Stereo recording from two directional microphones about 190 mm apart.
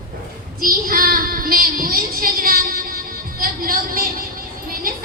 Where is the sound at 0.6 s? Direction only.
50° right (ahead or behind).